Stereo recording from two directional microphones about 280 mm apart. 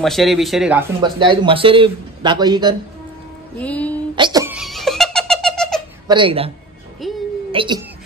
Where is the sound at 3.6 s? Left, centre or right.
Centre.